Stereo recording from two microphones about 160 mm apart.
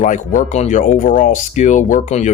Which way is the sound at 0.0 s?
50° left (ahead or behind).